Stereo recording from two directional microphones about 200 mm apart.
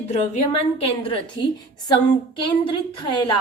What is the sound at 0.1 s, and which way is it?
A woman's voice, 30° left (ahead or behind).